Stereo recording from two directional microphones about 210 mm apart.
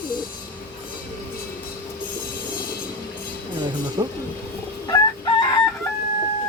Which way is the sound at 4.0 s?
20° right (ahead or behind).